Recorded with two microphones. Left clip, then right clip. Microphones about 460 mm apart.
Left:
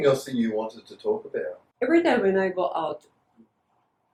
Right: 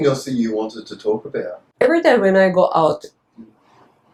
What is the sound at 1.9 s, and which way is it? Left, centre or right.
Speech, right.